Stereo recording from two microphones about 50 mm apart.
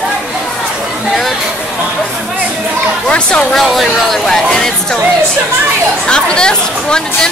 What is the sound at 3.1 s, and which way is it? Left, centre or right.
Chatter, left.